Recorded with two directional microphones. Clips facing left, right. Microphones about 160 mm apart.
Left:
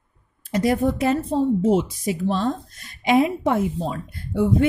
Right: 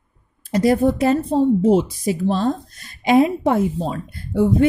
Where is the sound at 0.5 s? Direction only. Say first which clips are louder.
Right 4 dB; 35° right (ahead or behind).